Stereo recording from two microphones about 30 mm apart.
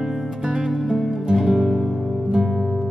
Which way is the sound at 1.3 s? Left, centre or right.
Centre.